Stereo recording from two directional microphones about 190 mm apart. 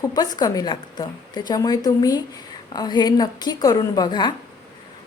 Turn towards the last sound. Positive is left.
turn(degrees=25)  # may be behind; listen again after turning